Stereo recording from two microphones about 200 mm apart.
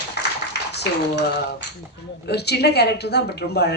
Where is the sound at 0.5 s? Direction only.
55° left (ahead or behind).